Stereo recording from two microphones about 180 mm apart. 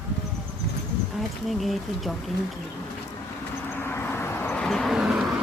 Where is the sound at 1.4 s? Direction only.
Centre (ahead or behind).